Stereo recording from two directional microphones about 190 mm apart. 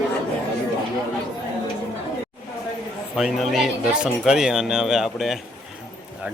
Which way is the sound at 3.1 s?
Centre (ahead or behind).